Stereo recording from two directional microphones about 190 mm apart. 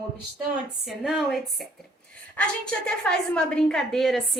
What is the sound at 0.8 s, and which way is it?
A woman's voice, centre (ahead or behind).